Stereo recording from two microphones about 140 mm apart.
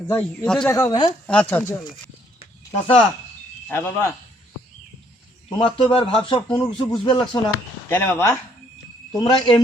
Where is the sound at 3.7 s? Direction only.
15° left (ahead or behind).